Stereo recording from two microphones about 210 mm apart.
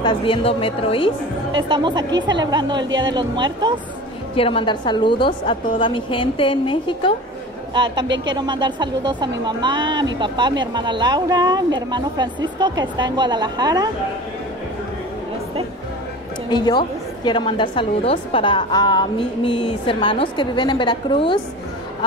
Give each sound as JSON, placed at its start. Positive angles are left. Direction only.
{"t": 0.0, "sound": "a woman's voice", "side_deg": 25}
{"t": 1.7, "sound": "speech", "side_deg": -20}
{"t": 4.4, "sound": "a woman's voice", "side_deg": 25}
{"t": 7.7, "sound": "speech", "side_deg": -20}
{"t": 16.4, "sound": "a woman's voice", "side_deg": 20}